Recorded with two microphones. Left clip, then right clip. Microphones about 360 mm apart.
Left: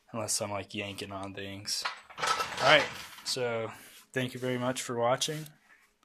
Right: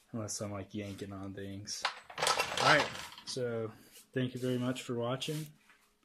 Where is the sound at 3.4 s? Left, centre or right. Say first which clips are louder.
Left 4 dB; left.